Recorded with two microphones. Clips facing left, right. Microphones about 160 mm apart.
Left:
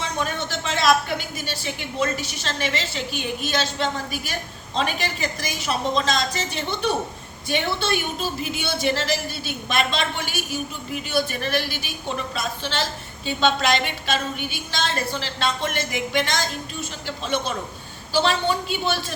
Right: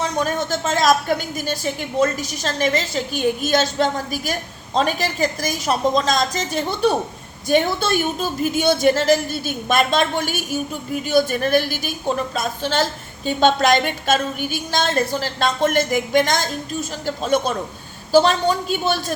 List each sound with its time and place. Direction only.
0.0 s a woman's voice: 40° right (ahead or behind)